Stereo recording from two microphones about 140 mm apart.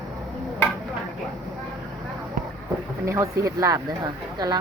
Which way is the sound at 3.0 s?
20° right (ahead or behind).